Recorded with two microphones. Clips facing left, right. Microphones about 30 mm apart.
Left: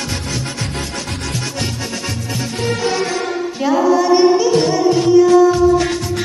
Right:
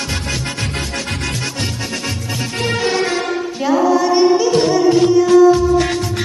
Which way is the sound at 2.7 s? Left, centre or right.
Right.